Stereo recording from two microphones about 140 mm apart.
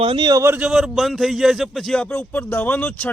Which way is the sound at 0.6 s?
5° right (ahead or behind).